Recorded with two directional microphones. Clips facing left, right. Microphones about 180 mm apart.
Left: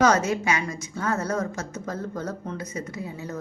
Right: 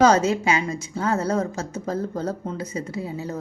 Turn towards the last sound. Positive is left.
turn(degrees=-30)  # may be behind; listen again after turning